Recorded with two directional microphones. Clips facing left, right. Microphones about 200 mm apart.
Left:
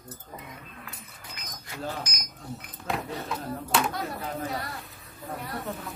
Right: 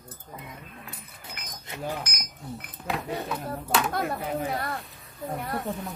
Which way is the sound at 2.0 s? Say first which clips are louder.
Right 1 dB; 55° right (ahead or behind).